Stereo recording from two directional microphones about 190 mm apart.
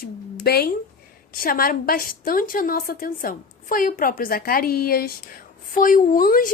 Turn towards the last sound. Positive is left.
turn(degrees=45)  # may be behind; listen again after turning